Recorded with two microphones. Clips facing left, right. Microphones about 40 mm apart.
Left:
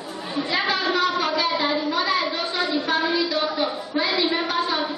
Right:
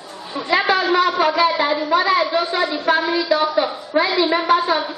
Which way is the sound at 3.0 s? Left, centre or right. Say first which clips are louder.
Right 2 dB; centre.